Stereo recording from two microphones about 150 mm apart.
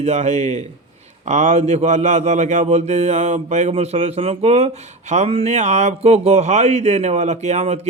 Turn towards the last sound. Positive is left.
turn(degrees=-50)  # may be behind; listen again after turning